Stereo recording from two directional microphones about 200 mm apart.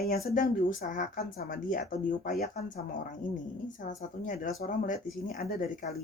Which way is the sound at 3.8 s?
40° left (ahead or behind).